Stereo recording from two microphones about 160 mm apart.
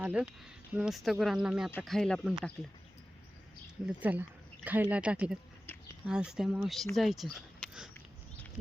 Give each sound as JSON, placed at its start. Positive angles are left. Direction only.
{"t": 0.0, "sound": "speech", "side_deg": -10}
{"t": 3.8, "sound": "speech", "side_deg": -10}
{"t": 7.3, "sound": "a sound", "side_deg": -5}